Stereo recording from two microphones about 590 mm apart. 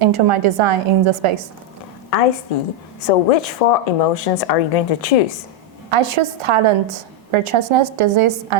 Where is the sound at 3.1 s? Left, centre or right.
Left.